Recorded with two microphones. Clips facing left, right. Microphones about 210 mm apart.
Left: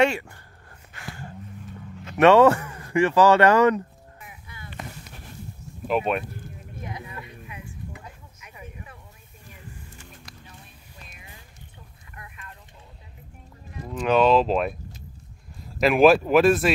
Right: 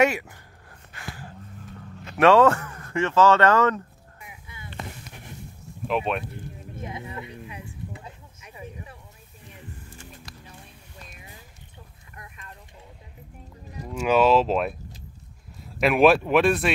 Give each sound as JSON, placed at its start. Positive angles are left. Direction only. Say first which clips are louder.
{"t": 0.0, "sound": "a sound", "louder": "even", "side_deg": -10}
{"t": 2.1, "sound": "speech", "louder": "left 2 dB", "side_deg": 5}
{"t": 5.9, "sound": "speech", "louder": "left 2 dB", "side_deg": 5}
{"t": 6.8, "sound": "a sound", "louder": "right 2 dB", "side_deg": -25}
{"t": 13.8, "sound": "speech", "louder": "even", "side_deg": -10}
{"t": 15.8, "sound": "speech", "louder": "left 2 dB", "side_deg": 0}